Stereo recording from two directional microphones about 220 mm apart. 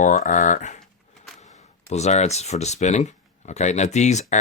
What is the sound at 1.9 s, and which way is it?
Speech, 30° left (ahead or behind).